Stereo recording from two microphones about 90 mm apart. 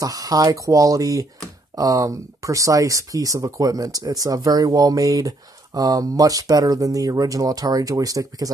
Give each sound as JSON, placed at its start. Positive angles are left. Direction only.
{"t": 0.0, "sound": "speech", "side_deg": -40}